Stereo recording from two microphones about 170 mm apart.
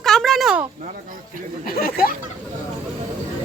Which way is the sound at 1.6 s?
55° left (ahead or behind).